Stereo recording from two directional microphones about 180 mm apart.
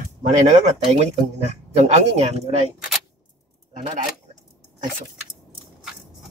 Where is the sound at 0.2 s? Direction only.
40° right (ahead or behind).